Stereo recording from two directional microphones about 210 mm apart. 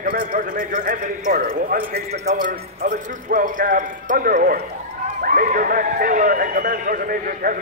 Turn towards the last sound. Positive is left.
turn(degrees=-40)  # may be behind; listen again after turning